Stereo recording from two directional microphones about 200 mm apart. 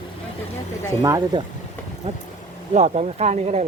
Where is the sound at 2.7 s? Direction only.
35° right (ahead or behind).